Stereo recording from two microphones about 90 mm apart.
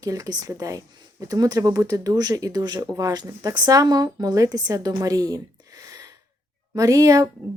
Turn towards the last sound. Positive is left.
turn(degrees=-40)  # may be behind; listen again after turning